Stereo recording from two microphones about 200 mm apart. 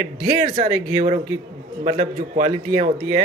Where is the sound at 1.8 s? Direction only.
35° right (ahead or behind).